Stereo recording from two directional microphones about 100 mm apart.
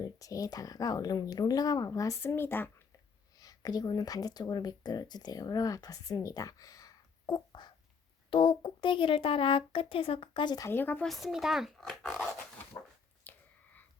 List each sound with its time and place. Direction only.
0.0 s speech: 35° left (ahead or behind)
3.3 s speech: 40° left (ahead or behind)
8.3 s speech: 60° left (ahead or behind)
10.7 s speech: 20° left (ahead or behind)
11.0 s speech: centre (ahead or behind)
13.3 s a sound: 20° left (ahead or behind)